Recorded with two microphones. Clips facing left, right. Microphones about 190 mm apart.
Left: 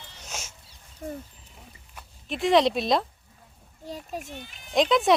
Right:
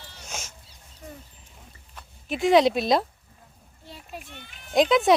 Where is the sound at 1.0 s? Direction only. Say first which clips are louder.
Left 8 dB; 50° left (ahead or behind).